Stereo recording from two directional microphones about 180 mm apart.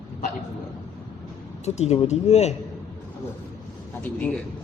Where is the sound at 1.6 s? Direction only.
40° left (ahead or behind).